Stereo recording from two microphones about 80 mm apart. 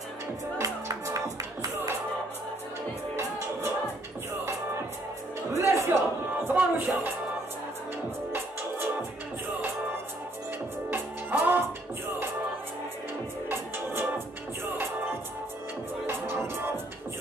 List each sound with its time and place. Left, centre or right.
0.6 s music: right
3.2 s music: right
5.6 s music: right
5.9 s music: right
10.9 s music: right
13.5 s music: right
16.1 s music: right